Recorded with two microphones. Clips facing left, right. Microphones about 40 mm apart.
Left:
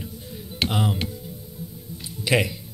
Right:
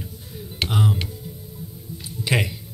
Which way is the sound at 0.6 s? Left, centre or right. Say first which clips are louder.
Right 1 dB; left.